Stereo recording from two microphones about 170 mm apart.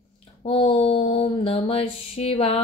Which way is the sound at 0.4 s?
35° left (ahead or behind).